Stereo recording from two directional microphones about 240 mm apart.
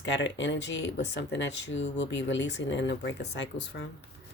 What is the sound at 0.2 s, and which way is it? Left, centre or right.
Speech, left.